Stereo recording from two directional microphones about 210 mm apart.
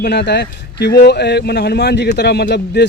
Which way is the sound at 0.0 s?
50° left (ahead or behind).